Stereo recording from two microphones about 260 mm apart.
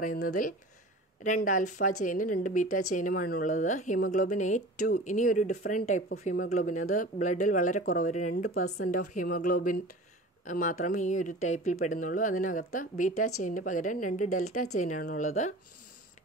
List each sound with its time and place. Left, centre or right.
1.2 s speech: left
8.6 s a woman's voice: left
8.9 s speech: left